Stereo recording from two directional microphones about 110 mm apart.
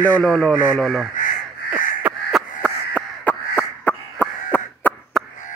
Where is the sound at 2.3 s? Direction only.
10° left (ahead or behind).